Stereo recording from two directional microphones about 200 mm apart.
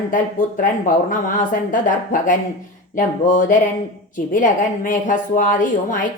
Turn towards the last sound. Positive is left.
turn(degrees=40)  # may be behind; listen again after turning